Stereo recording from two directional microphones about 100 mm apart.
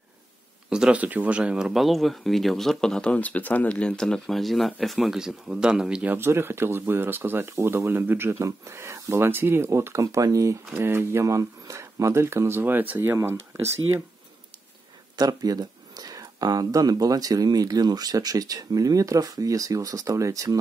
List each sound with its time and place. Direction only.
0.7 s speech: 10° right (ahead or behind)
6.1 s speech: 25° right (ahead or behind)
15.1 s speech: 40° right (ahead or behind)